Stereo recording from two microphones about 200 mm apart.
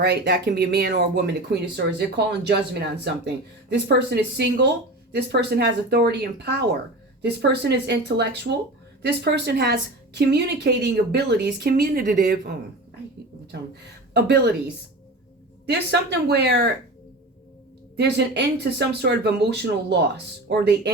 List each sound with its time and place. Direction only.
0.0 s speech: 55° right (ahead or behind)
14.1 s speech: 55° right (ahead or behind)
15.6 s speech: 60° right (ahead or behind)
17.9 s speech: 55° right (ahead or behind)